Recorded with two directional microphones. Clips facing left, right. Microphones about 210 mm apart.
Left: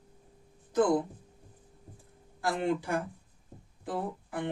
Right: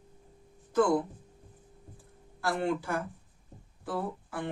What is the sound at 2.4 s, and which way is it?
A woman's voice, 15° left (ahead or behind).